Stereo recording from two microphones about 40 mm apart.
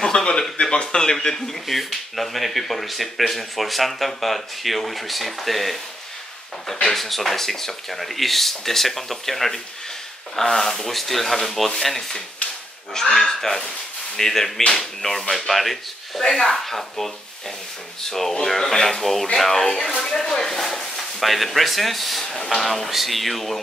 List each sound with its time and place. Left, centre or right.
0.0 s speech: centre
18.5 s speech: centre
21.2 s speech: centre
22.2 s speech: centre
22.6 s speech: centre